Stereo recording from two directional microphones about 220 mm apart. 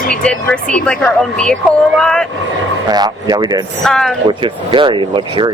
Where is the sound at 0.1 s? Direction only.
5° left (ahead or behind).